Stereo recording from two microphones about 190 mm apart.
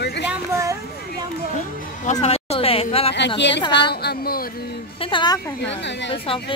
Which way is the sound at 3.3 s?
70° left (ahead or behind).